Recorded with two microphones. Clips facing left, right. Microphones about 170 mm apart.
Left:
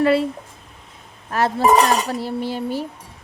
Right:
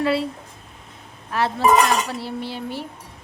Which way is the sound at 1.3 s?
45° left (ahead or behind).